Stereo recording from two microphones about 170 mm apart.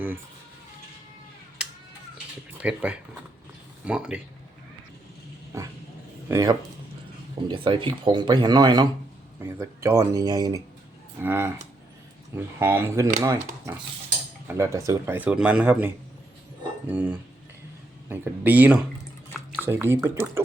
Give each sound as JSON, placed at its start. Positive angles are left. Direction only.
{"t": 2.6, "sound": "speech", "side_deg": -5}
{"t": 5.5, "sound": "speech", "side_deg": -15}
{"t": 7.4, "sound": "speech", "side_deg": -30}
{"t": 16.9, "sound": "speech", "side_deg": -10}